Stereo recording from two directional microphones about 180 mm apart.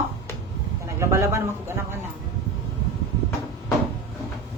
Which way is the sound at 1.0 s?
15° right (ahead or behind).